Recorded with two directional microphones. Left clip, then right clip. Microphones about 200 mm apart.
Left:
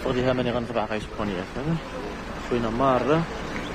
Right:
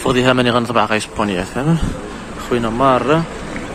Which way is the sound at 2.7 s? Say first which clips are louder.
Right 8 dB; 10° right (ahead or behind).